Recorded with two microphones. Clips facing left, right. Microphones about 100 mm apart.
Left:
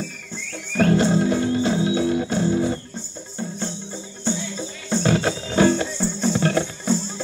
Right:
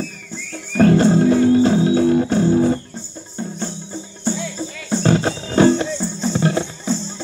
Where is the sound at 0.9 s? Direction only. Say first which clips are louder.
Right 5 dB; 35° right (ahead or behind).